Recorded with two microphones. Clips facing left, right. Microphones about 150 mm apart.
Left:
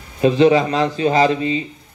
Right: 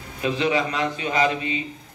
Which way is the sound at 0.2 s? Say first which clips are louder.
Left 10 dB; 35° left (ahead or behind).